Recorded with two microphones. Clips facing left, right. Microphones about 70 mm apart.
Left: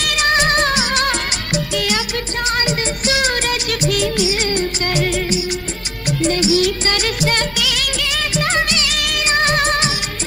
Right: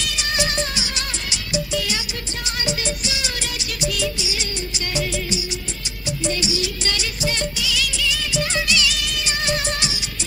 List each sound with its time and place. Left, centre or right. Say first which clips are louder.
0.0 s music of bollywood: left 8 dB; left